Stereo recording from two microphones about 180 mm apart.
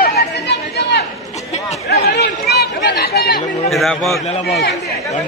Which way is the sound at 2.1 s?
65° left (ahead or behind).